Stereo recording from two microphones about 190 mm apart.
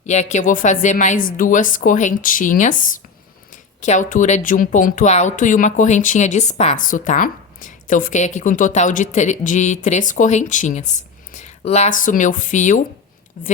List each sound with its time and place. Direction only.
0.0 s a woman's voice: 40° left (ahead or behind)